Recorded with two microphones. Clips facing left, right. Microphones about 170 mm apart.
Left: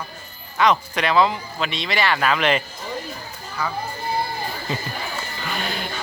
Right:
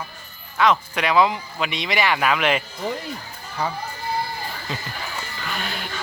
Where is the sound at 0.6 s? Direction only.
5° right (ahead or behind).